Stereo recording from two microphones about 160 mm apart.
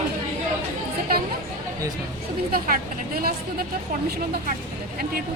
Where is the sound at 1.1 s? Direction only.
70° right (ahead or behind).